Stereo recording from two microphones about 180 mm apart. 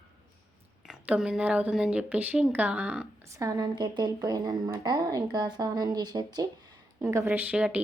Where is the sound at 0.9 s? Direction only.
5° right (ahead or behind).